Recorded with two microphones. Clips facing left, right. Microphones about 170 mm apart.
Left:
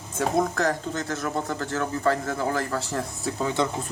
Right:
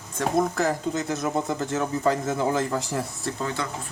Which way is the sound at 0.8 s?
15° right (ahead or behind).